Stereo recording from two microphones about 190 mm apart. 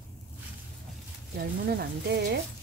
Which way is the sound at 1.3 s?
55° right (ahead or behind).